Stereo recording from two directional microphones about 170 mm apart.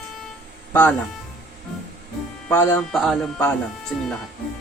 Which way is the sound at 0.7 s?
10° left (ahead or behind).